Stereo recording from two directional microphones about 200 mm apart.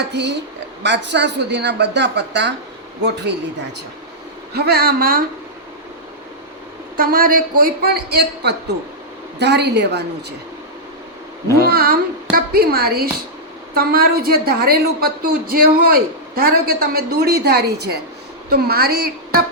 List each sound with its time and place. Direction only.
0.1 s speech: 60° right (ahead or behind)
4.5 s a woman's voice: 50° right (ahead or behind)
6.9 s a woman's voice: 45° right (ahead or behind)
11.7 s a woman's voice: 50° right (ahead or behind)